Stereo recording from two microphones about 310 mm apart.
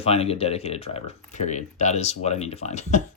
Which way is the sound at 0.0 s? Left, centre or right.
Centre.